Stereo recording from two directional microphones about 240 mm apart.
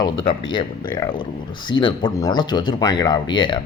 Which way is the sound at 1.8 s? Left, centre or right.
Centre.